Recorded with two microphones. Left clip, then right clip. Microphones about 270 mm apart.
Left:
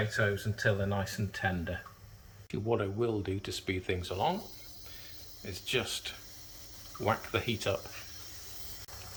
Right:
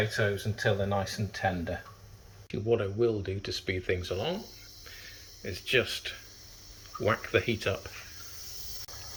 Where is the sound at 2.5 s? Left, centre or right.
Centre.